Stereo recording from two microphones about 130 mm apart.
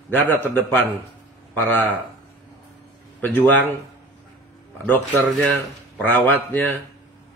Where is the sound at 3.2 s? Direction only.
15° left (ahead or behind).